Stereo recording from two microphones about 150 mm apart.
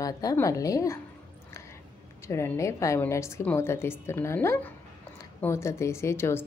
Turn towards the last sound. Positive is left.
turn(degrees=15)  # may be behind; listen again after turning